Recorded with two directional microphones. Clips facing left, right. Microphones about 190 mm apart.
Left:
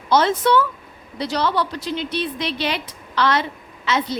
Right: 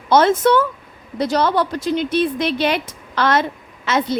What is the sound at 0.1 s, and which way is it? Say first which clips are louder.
A woman's voice: right 3 dB; 50° right (ahead or behind).